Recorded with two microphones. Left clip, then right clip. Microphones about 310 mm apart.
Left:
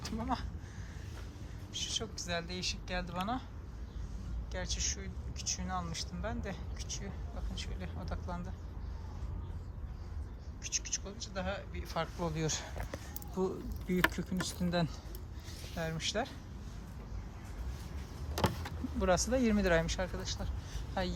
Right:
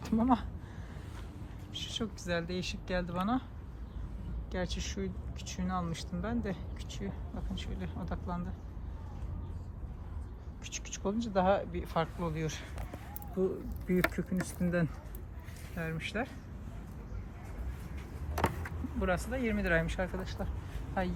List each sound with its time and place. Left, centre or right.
0.0 s speech: centre
1.7 s speech: centre
4.5 s speech: centre
10.6 s speech: centre
12.2 s speech: centre
13.9 s speech: centre
18.9 s speech: centre